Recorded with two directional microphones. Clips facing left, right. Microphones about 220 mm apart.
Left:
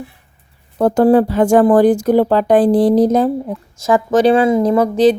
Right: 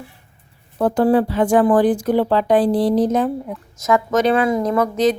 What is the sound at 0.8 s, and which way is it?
Speech, 40° left (ahead or behind).